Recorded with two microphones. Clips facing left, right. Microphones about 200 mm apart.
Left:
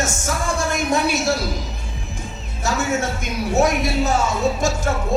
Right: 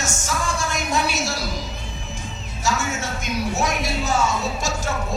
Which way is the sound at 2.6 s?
55° left (ahead or behind).